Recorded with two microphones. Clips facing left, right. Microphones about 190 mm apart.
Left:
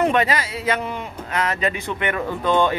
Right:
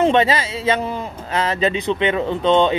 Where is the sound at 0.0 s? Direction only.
25° right (ahead or behind).